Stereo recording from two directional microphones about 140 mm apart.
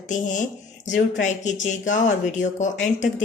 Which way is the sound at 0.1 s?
60° left (ahead or behind).